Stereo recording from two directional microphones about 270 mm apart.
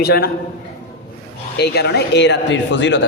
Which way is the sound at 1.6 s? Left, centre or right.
Left.